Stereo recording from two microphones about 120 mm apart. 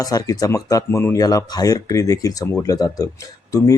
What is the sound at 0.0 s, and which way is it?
Speech, 30° left (ahead or behind).